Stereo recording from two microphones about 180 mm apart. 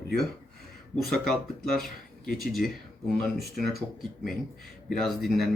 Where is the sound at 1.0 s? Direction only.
Centre (ahead or behind).